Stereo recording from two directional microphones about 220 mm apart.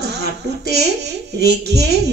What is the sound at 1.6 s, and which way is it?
Speech, 50° right (ahead or behind).